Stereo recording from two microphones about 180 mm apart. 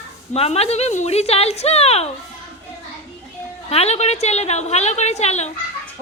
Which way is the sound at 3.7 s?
35° left (ahead or behind).